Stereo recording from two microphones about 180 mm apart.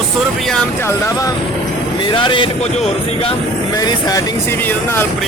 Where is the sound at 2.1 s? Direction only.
30° left (ahead or behind).